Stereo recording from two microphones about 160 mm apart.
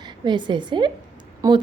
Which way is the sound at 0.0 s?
30° right (ahead or behind).